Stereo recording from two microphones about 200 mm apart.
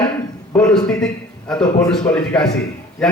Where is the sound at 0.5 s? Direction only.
5° left (ahead or behind).